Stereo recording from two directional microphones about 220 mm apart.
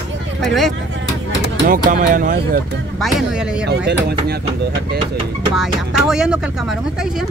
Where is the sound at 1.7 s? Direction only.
40° right (ahead or behind).